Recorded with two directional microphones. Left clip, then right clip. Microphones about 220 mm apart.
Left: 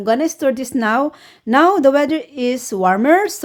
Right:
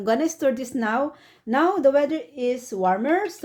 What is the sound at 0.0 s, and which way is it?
A woman's voice, 20° left (ahead or behind).